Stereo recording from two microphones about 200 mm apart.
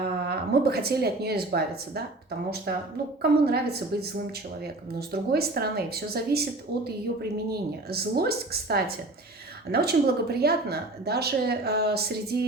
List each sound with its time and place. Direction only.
0.3 s speech: 50° right (ahead or behind)
3.2 s speech: 55° right (ahead or behind)